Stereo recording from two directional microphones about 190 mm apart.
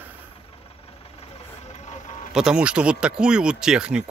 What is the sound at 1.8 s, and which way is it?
Vehicle, 35° left (ahead or behind).